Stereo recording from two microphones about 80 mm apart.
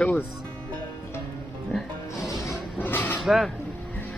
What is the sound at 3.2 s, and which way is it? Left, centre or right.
Speech, centre.